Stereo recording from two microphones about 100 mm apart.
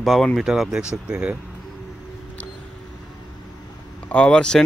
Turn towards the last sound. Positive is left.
turn(degrees=10)  # may be behind; listen again after turning